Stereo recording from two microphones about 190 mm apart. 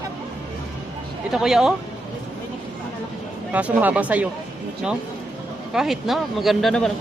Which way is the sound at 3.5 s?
5° right (ahead or behind).